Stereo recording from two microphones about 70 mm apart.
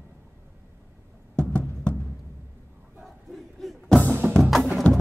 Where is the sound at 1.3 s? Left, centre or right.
Centre.